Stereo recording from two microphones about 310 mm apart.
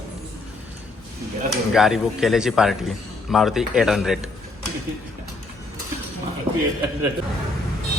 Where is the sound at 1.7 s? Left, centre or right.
Centre.